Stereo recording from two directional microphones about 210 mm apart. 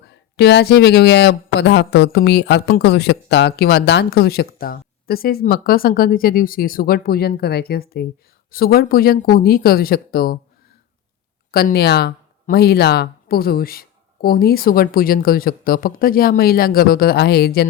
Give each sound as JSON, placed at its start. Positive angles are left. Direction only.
{"t": 0.1, "sound": "speech", "side_deg": 55}
{"t": 11.5, "sound": "speech", "side_deg": 50}